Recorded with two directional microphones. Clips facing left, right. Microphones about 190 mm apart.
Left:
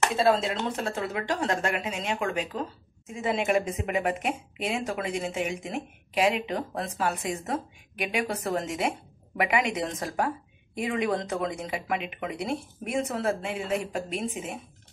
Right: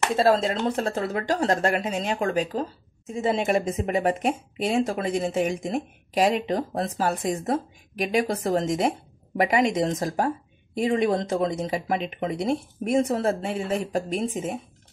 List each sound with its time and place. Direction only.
0.1 s a woman's voice: 40° right (ahead or behind)